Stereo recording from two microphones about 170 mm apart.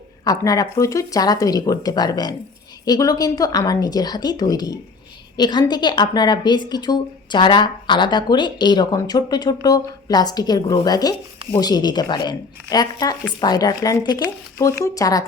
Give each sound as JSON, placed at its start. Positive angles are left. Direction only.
{"t": 0.3, "sound": "a woman's voice", "side_deg": 20}